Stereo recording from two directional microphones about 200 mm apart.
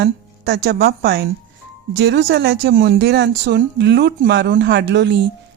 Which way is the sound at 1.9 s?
65° right (ahead or behind).